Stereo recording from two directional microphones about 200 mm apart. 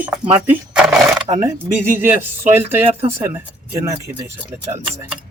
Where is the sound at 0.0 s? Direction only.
5° right (ahead or behind).